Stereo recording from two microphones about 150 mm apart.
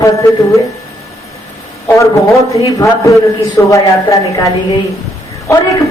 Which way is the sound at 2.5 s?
20° left (ahead or behind).